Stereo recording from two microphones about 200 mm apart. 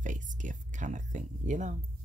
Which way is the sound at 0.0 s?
40° right (ahead or behind).